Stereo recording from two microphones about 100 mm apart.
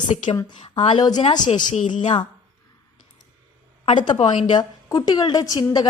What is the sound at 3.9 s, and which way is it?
A woman's voice, 50° left (ahead or behind).